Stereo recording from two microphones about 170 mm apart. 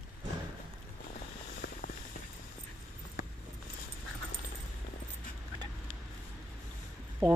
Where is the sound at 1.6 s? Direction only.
80° left.